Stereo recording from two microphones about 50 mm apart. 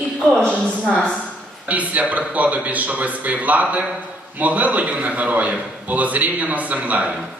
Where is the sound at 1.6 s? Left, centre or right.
Right.